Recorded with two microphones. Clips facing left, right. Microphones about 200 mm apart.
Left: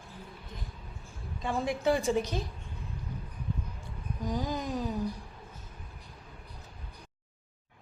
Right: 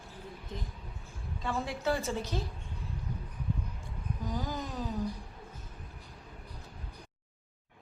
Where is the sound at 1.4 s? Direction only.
15° left (ahead or behind).